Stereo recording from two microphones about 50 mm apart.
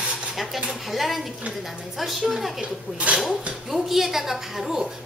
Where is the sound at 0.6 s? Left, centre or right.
Centre.